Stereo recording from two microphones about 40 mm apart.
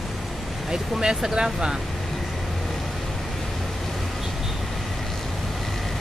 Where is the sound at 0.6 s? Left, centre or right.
Centre.